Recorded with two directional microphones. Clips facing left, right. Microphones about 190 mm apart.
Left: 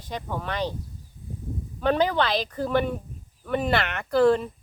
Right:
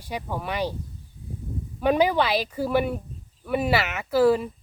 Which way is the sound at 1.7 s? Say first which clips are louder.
Right 2 dB; 10° right (ahead or behind).